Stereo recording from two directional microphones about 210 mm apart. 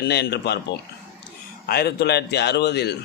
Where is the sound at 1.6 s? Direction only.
50° left (ahead or behind).